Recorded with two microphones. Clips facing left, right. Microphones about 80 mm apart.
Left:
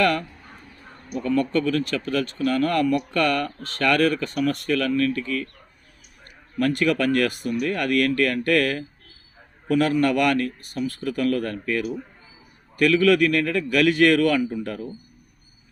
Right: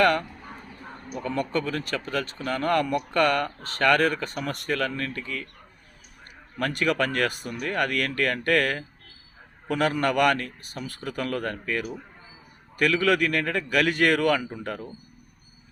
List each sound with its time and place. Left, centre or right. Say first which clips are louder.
0.0 s duck: even; right
1.1 s speech: left 5 dB; right
6.6 s speech: left 4 dB; right